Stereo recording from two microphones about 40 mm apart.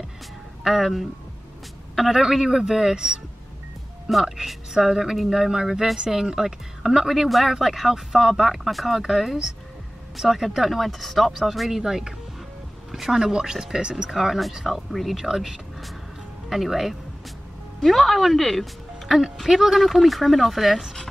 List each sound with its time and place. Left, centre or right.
0.7 s speech: centre
4.2 s speech: centre
7.2 s speech: centre
11.7 s speech: centre
14.1 s speech: centre
17.7 s speech: centre
19.0 s speech: centre
19.8 s speech: centre